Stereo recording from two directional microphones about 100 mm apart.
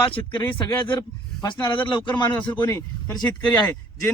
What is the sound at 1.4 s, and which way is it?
Speech, 50° left (ahead or behind).